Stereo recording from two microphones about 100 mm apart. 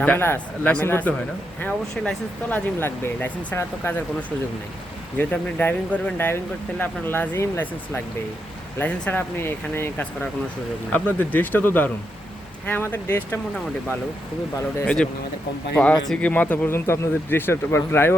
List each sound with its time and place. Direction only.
0.0 s speech: 20° left (ahead or behind)
5.1 s speech: 15° left (ahead or behind)
15.8 s speech: 10° left (ahead or behind)